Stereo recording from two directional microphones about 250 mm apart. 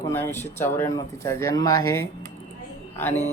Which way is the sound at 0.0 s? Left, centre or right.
Centre.